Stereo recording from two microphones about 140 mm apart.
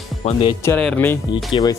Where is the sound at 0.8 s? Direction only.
10° left (ahead or behind).